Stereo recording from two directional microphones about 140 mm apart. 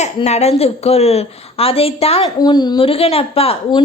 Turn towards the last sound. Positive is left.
turn(degrees=45)  # may be behind; listen again after turning